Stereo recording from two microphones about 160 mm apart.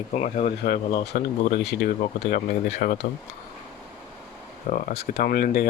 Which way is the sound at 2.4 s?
65° left (ahead or behind).